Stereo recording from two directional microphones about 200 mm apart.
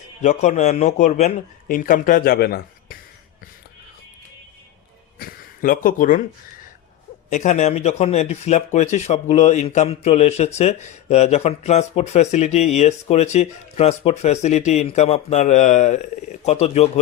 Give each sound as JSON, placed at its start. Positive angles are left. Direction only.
{"t": 0.2, "sound": "speech", "side_deg": 35}
{"t": 5.2, "sound": "a sound", "side_deg": 45}
{"t": 7.3, "sound": "speech", "side_deg": 35}